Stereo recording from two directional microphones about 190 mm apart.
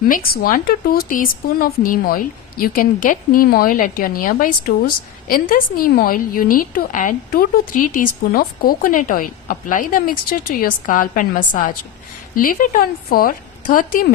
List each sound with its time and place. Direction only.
0.4 s speech: 50° left (ahead or behind)